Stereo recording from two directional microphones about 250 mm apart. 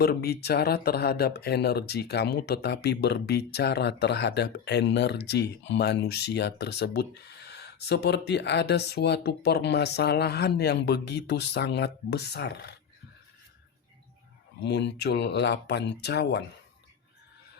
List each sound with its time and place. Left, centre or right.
0.0 s speech: left
14.6 s speech: left